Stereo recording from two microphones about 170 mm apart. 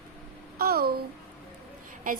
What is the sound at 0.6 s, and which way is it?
Babbling, 65° right (ahead or behind).